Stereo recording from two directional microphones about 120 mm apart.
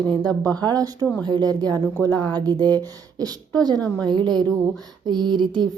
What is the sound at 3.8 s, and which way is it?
Speech, 10° left (ahead or behind).